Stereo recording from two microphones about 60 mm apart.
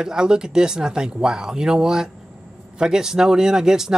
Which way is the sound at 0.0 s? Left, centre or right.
Centre.